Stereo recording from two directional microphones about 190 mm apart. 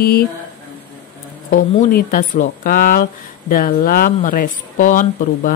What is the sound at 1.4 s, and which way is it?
Speech, 45° left (ahead or behind).